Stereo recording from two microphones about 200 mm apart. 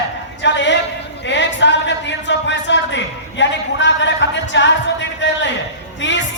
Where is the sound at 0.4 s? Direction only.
60° left (ahead or behind).